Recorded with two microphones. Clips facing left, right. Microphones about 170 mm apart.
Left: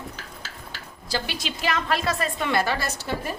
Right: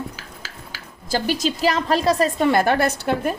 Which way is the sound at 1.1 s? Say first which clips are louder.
Right 8 dB; 45° right (ahead or behind).